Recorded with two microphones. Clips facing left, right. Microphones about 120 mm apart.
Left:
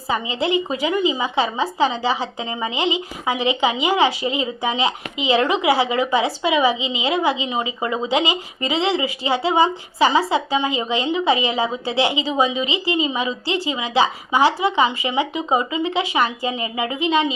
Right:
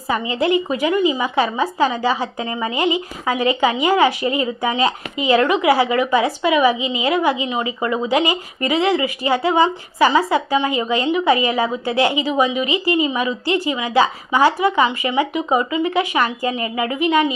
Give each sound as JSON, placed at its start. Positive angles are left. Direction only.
{"t": 0.1, "sound": "a woman's voice", "side_deg": 25}